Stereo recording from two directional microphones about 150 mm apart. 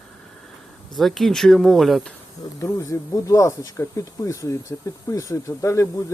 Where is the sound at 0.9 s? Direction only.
Centre (ahead or behind).